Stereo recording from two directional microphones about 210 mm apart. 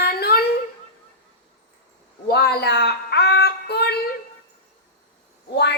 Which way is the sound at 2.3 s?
50° left (ahead or behind).